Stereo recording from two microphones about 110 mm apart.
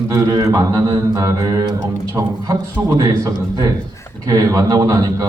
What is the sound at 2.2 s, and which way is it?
Speech, 25° right (ahead or behind).